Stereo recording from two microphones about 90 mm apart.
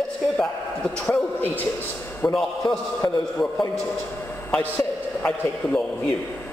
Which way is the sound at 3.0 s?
35° left (ahead or behind).